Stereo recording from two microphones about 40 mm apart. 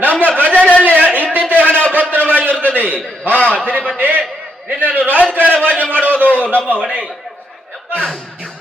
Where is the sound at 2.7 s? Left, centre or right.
Right.